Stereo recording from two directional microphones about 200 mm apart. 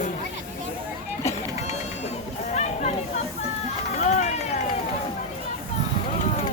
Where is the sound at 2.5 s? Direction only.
35° left (ahead or behind).